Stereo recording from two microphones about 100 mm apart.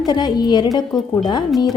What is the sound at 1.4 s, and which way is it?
Speech, centre (ahead or behind).